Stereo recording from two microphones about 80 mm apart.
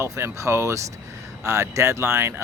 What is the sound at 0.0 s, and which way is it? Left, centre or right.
Speech, right.